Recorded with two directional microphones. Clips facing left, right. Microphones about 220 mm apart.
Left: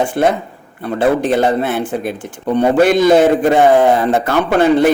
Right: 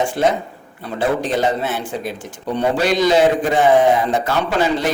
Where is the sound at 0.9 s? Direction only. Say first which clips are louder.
Left 5 dB; 55° left (ahead or behind).